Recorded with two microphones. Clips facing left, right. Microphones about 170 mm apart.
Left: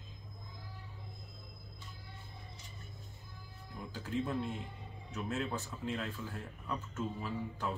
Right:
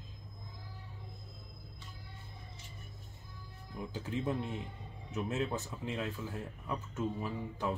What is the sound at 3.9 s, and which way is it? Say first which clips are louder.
Speech: even; 20° right (ahead or behind).